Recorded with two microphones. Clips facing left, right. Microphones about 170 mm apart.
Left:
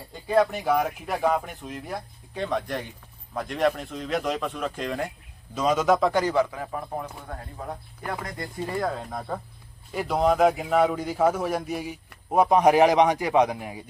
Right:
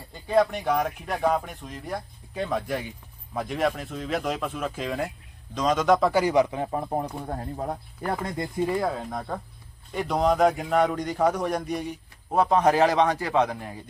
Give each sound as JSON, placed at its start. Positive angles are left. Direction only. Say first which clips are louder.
{"t": 0.1, "sound": "a man's voice", "louder": "even", "side_deg": 0}
{"t": 8.2, "sound": "speech", "louder": "right 5 dB", "side_deg": -20}
{"t": 8.7, "sound": "a man's voice", "louder": "right 2 dB", "side_deg": -5}